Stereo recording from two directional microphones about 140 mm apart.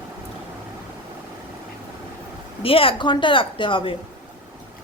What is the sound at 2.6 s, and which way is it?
A woman's voice, 40° left (ahead or behind).